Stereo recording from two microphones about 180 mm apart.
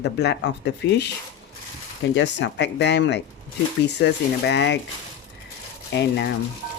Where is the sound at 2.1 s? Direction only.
80° left.